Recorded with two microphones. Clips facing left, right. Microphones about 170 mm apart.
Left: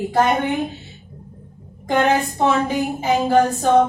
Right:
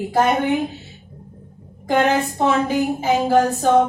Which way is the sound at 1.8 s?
Centre (ahead or behind).